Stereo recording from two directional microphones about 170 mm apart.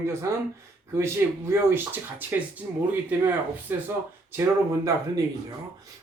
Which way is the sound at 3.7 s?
10° right (ahead or behind).